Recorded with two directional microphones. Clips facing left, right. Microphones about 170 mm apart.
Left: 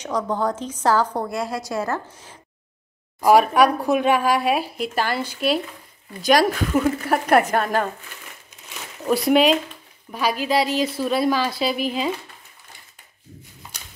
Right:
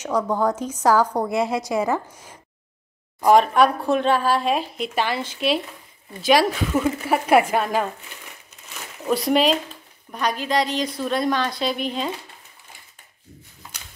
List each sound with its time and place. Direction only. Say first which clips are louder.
0.0 s a woman's voice: right 2 dB; 10° right (ahead or behind)
1.1 s a woman's voice: right 4 dB; 20° right (ahead or behind)
3.2 s a woman's voice: even; 10° left (ahead or behind)
9.0 s a woman's voice: left 2 dB; centre (ahead or behind)